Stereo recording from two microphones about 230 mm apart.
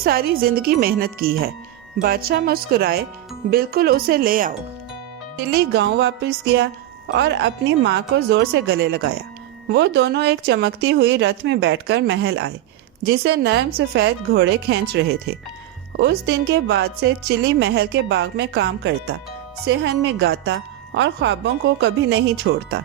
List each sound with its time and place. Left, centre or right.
0.0 s a woman's voice: right